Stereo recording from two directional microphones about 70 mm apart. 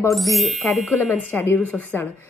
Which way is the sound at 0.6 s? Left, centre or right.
Left.